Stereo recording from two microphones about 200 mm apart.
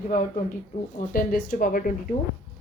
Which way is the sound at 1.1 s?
45° left (ahead or behind).